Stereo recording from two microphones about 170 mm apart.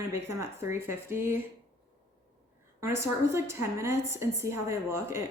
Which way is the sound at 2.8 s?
15° right (ahead or behind).